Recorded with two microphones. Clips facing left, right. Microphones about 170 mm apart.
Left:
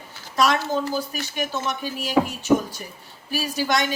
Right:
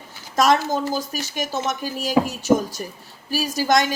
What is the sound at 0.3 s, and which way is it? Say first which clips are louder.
Speech: right 3 dB; 45° right (ahead or behind).